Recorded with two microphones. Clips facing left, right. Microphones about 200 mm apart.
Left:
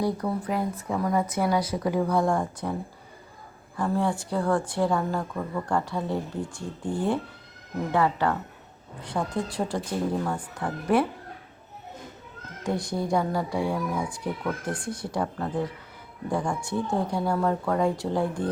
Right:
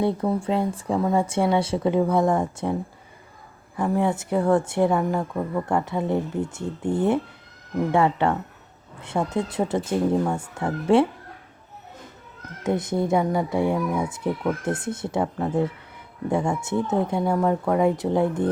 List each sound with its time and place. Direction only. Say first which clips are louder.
0.0 s a woman's voice: right 4 dB; 25° right (ahead or behind)
3.8 s a woman's voice: right 3 dB; 20° right (ahead or behind)
12.6 s a woman's voice: right 5 dB; 20° right (ahead or behind)